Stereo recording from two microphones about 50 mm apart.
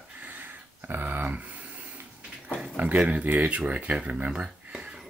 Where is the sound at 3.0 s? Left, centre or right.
Right.